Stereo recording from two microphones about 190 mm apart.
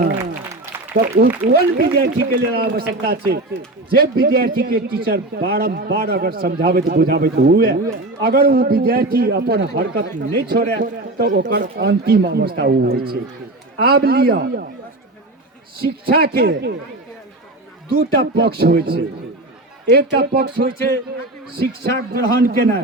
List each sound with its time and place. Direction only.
0.9 s a man's voice: 50° right (ahead or behind)
15.8 s a man's voice: 55° right (ahead or behind)
17.8 s a man's voice: 55° right (ahead or behind)